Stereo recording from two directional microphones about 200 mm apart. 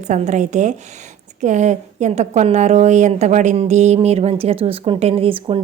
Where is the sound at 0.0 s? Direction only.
35° right (ahead or behind).